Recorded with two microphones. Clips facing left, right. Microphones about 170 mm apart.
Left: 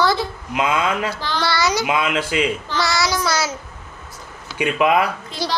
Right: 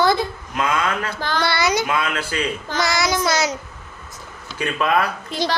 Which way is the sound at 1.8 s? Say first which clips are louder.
Left 3 dB; 15° left (ahead or behind).